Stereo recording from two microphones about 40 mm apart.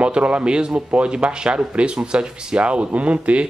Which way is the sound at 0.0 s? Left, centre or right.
Right.